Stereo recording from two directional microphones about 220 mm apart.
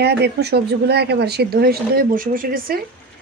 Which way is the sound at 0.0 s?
50° right (ahead or behind).